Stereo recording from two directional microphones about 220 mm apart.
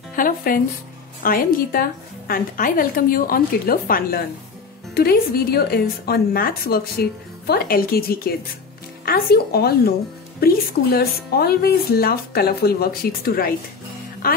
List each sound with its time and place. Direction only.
0.1 s a woman's voice: 40° left (ahead or behind)